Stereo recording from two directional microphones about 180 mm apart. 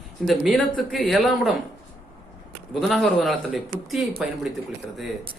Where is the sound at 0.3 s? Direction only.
Centre (ahead or behind).